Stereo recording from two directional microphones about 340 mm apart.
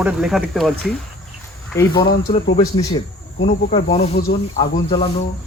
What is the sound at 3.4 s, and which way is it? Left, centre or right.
Speech, centre.